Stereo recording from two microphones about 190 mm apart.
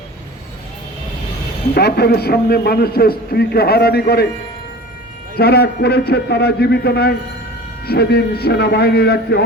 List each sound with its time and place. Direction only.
1.7 s a man's voice: 55° left (ahead or behind)
5.4 s a man's voice: 55° left (ahead or behind)